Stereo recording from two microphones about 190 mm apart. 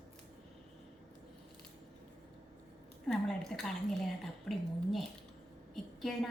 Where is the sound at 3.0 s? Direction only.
5° left (ahead or behind).